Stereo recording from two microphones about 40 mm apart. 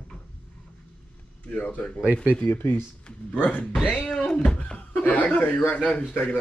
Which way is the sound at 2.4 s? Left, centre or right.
Left.